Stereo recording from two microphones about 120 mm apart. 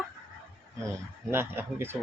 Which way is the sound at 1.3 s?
20° right (ahead or behind).